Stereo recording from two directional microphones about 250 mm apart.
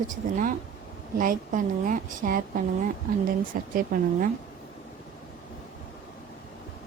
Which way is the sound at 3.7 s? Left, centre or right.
Right.